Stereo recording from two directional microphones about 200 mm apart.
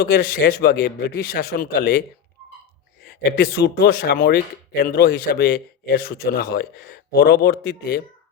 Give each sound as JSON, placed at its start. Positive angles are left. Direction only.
{"t": 0.0, "sound": "speech", "side_deg": 50}